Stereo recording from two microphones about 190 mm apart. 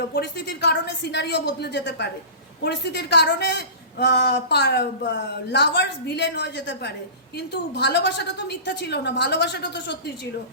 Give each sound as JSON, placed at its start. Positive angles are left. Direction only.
{"t": 0.1, "sound": "a woman's voice", "side_deg": 60}